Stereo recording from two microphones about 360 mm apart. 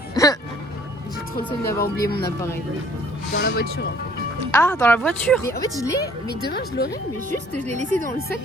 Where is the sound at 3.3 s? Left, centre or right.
Left.